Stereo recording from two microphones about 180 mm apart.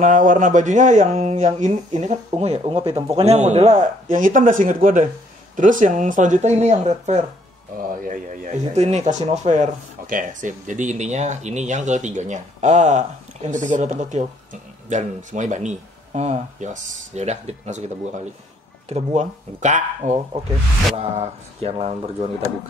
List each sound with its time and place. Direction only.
0.0 s speech: 45° right (ahead or behind)